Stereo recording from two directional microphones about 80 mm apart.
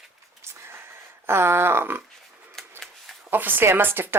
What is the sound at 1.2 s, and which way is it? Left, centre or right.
Speech, right.